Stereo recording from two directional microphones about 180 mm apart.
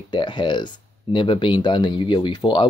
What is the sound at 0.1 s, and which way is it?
Speech, 25° left (ahead or behind).